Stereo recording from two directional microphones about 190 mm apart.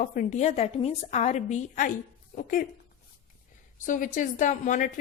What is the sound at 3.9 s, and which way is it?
A woman's voice, 40° left (ahead or behind).